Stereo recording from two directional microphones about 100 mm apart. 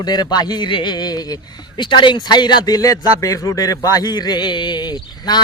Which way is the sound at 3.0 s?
35° left (ahead or behind).